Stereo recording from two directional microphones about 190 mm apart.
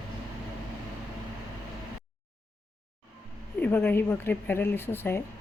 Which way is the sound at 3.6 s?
10° left (ahead or behind).